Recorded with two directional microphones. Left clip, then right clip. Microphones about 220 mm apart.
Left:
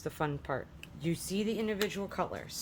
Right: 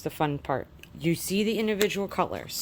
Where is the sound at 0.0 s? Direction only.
25° right (ahead or behind).